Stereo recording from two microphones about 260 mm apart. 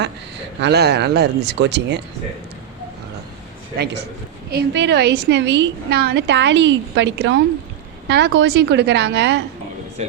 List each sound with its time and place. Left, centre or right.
0.6 s a woman's voice: right
4.4 s a woman's voice: right